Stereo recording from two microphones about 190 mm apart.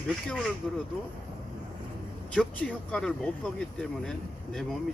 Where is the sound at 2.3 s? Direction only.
5° left (ahead or behind).